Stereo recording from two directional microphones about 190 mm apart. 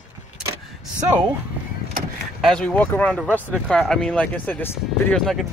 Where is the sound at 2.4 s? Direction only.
5° left (ahead or behind).